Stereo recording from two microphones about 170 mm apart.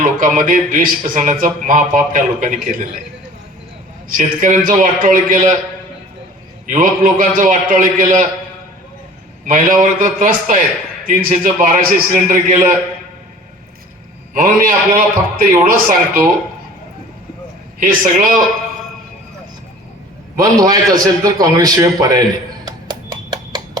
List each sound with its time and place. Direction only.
0.0 s speech: 50° right (ahead or behind)
4.2 s speech: 55° right (ahead or behind)
6.7 s speech: 55° right (ahead or behind)
9.5 s speech: 50° right (ahead or behind)
14.3 s a man's voice: 55° right (ahead or behind)
17.7 s speech: 55° right (ahead or behind)
20.4 s a man's voice: 20° right (ahead or behind)
22.6 s music: 25° right (ahead or behind)